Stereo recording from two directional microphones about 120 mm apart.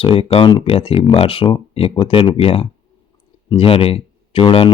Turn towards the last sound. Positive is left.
turn(degrees=50)  # may be behind; listen again after turning